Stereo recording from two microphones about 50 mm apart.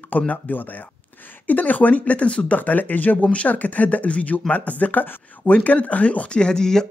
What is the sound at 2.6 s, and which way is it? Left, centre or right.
Speech, left.